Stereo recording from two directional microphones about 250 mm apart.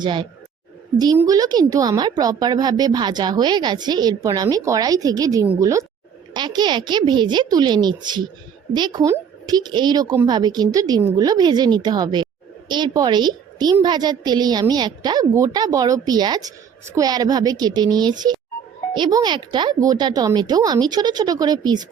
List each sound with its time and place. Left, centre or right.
0.0 s a woman's voice: centre